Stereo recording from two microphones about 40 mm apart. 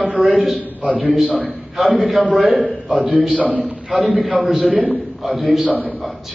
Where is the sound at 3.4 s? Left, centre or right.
Right.